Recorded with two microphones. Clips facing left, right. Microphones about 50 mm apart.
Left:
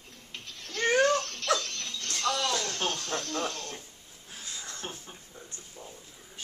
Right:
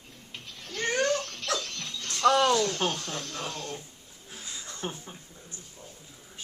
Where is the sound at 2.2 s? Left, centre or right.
Right.